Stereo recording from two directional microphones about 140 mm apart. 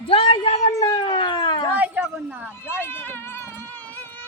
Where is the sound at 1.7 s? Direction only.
10° right (ahead or behind).